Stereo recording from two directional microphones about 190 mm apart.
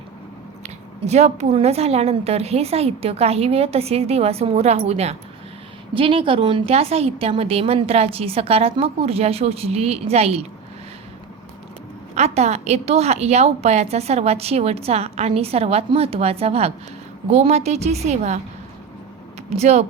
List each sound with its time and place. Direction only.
1.0 s a woman's voice: 35° right (ahead or behind)
12.1 s a woman's voice: 35° right (ahead or behind)
19.5 s a woman's voice: 35° right (ahead or behind)